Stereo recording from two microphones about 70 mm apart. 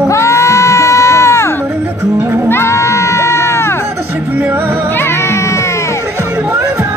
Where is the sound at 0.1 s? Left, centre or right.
Left.